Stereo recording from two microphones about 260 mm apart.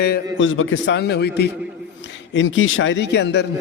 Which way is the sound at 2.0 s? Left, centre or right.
Left.